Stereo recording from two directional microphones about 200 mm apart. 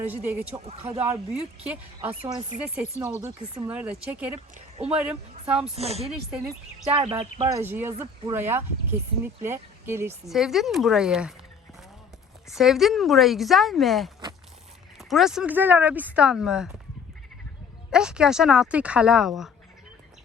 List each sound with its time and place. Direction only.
0.1 s speech: 10° right (ahead or behind)
0.6 s speech: 30° right (ahead or behind)
1.0 s speech: 10° right (ahead or behind)
3.2 s speech: 20° right (ahead or behind)
3.7 s speech: 10° right (ahead or behind)
5.7 s speech: 30° right (ahead or behind)
7.6 s speech: 10° right (ahead or behind)
10.2 s speech: centre (ahead or behind)
12.5 s speech: centre (ahead or behind)
17.9 s speech: 5° right (ahead or behind)